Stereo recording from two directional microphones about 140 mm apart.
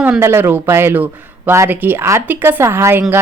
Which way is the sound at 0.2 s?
15° right (ahead or behind).